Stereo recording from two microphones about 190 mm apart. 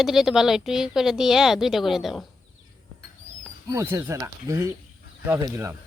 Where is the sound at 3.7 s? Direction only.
15° right (ahead or behind).